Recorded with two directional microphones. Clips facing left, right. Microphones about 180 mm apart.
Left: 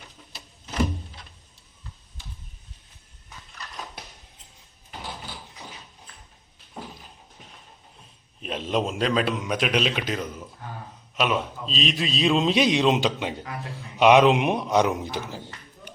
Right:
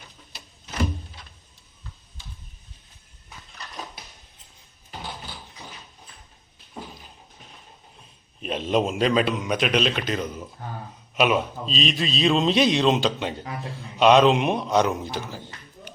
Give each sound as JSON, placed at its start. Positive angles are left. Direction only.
{"t": 8.4, "sound": "a man's voice", "side_deg": 0}
{"t": 11.2, "sound": "a man's voice", "side_deg": -5}